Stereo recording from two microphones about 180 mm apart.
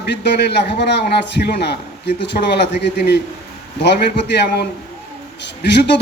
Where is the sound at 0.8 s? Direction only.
70° left (ahead or behind).